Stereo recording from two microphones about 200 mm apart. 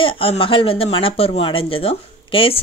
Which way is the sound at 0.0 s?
25° left (ahead or behind).